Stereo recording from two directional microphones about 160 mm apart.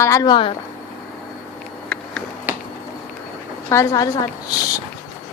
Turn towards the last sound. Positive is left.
turn(degrees=20)  # may be behind; listen again after turning